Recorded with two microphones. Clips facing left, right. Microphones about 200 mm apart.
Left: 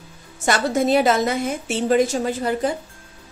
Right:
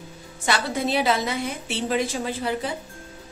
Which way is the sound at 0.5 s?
45° left (ahead or behind).